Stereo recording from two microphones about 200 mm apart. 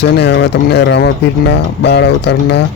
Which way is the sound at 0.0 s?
55° left (ahead or behind).